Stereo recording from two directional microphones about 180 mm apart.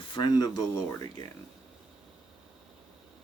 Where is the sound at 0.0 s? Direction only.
25° left (ahead or behind).